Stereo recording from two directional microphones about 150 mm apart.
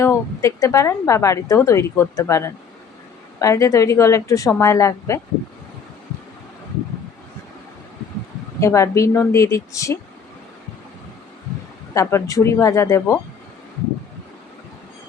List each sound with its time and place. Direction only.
0.0 s speech: 20° left (ahead or behind)
8.6 s speech: 20° left (ahead or behind)
11.9 s speech: 20° left (ahead or behind)